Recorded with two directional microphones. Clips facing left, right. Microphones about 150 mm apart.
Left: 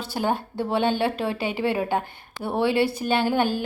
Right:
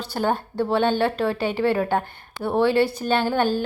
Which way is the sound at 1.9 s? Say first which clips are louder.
Right 2 dB; 55° right (ahead or behind).